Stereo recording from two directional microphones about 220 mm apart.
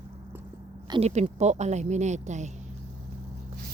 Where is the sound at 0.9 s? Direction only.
30° right (ahead or behind).